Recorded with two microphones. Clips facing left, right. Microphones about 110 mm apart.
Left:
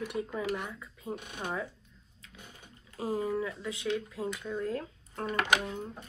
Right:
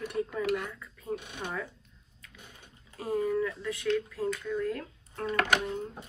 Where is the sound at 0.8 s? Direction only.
25° left (ahead or behind).